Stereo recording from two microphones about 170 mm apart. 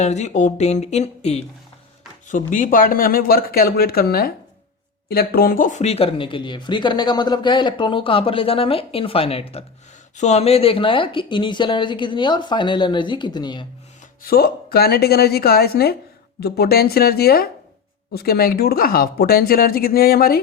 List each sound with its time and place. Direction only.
0.0 s speech: 40° left (ahead or behind)
2.5 s speech: 50° left (ahead or behind); by 13.7 s 25° left (ahead or behind)
14.2 s speech: 60° left (ahead or behind)